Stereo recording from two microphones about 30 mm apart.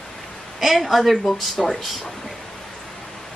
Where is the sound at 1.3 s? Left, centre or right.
Centre.